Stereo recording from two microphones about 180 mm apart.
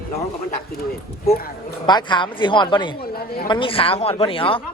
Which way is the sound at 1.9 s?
25° left (ahead or behind).